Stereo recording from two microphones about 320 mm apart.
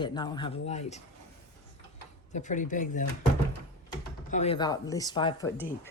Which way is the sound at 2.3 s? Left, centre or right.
Left.